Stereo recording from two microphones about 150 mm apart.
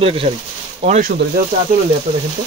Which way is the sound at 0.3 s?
40° right (ahead or behind).